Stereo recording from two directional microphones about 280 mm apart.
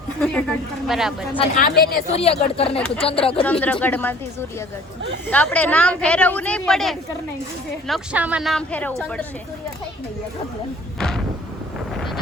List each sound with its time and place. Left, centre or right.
0.2 s speech: centre
1.4 s speech: left
2.1 s speech: left
3.4 s speech: centre
5.3 s speech: centre
11.9 s wind noise: centre